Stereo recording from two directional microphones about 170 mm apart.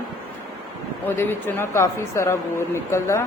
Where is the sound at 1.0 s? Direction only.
10° left (ahead or behind).